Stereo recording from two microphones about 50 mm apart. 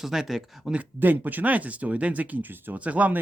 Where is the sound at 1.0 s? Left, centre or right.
Right.